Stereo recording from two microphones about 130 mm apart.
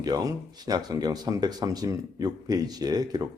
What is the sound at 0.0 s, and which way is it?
Speech, 30° right (ahead or behind).